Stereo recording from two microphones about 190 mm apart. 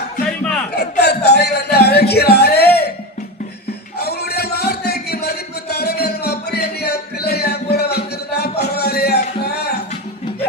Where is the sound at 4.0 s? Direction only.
55° left (ahead or behind).